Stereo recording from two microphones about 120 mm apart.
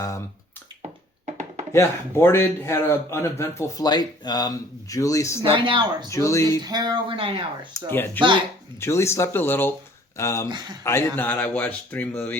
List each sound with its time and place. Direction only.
1.2 s chopping: 75° right (ahead or behind)
1.7 s a man's voice: 20° left (ahead or behind)
3.8 s speech: 35° left (ahead or behind)
5.5 s speech: 45° right (ahead or behind)
6.1 s a man's voice: 25° left (ahead or behind)
6.6 s speech: 35° right (ahead or behind)
7.7 s a man's voice: 20° left (ahead or behind)
10.5 s speech: 40° right (ahead or behind)
10.8 s speech: 20° left (ahead or behind)